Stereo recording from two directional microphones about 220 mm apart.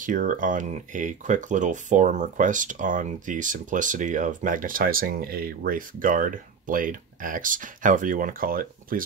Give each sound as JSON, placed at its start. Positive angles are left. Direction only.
{"t": 0.0, "sound": "speech", "side_deg": -35}